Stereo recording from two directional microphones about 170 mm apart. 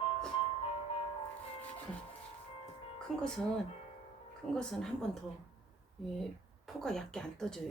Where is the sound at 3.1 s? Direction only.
Centre (ahead or behind).